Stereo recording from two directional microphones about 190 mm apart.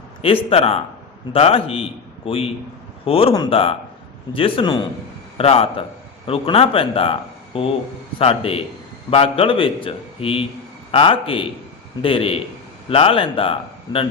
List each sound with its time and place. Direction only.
0.2 s a man's voice: 30° left (ahead or behind)